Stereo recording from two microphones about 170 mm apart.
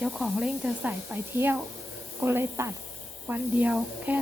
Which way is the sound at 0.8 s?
15° right (ahead or behind).